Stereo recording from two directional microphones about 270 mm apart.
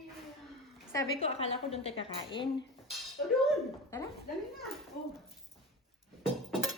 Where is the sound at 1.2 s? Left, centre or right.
Left.